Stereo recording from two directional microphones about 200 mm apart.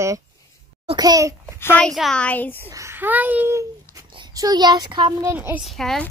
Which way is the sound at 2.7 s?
15° right (ahead or behind).